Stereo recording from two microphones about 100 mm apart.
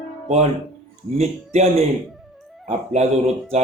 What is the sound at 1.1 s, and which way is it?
Speech, 90° right.